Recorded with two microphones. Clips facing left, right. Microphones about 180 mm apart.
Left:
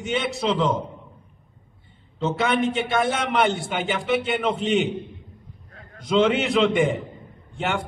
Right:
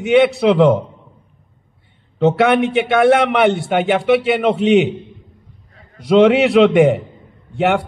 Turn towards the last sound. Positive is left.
turn(degrees=-65)  # may be behind; listen again after turning